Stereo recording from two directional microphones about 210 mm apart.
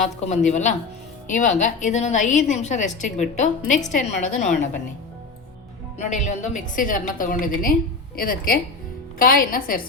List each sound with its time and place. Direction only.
0.0 s a woman's voice: 35° left (ahead or behind)
6.2 s a woman's voice: 35° left (ahead or behind)